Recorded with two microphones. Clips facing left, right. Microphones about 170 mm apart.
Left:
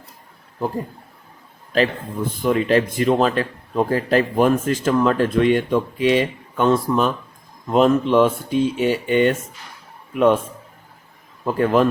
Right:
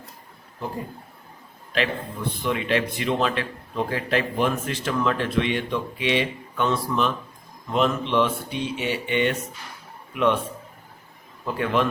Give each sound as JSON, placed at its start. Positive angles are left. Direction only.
{"t": 1.7, "sound": "a man's voice", "side_deg": 40}